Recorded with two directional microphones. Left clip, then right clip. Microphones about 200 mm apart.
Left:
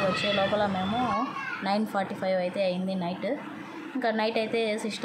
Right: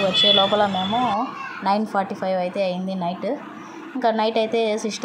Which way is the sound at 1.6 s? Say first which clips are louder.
Right 8 dB; 15° right (ahead or behind).